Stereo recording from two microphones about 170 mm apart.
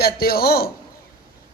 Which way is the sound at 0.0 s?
65° left (ahead or behind).